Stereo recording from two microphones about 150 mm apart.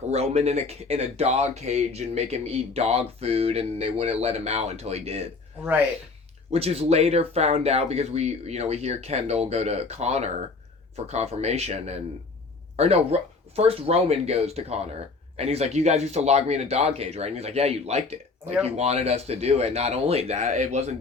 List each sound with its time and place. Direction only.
0.1 s speech: 45° right (ahead or behind)
6.5 s speech: 45° right (ahead or behind)